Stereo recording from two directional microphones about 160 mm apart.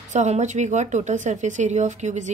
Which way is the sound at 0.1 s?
45° right (ahead or behind).